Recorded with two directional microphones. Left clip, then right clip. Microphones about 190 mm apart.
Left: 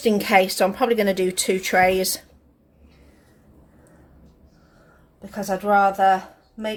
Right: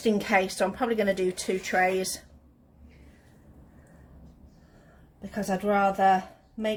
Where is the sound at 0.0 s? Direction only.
35° left (ahead or behind).